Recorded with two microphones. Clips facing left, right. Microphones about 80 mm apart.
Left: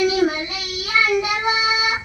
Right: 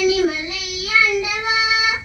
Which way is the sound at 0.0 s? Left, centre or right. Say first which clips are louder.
Right 1 dB; left.